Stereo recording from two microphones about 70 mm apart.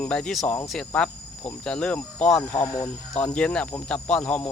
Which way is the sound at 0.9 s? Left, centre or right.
Centre.